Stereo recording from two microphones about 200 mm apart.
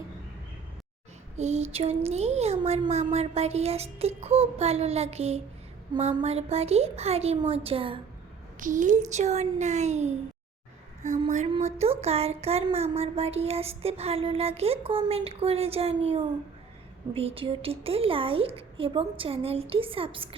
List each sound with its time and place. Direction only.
1.4 s speech: 35° right (ahead or behind)
8.5 s speech: 40° right (ahead or behind)
11.3 s a woman's voice: 30° right (ahead or behind)